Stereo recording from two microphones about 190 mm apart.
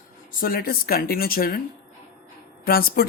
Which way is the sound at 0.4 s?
50° left (ahead or behind).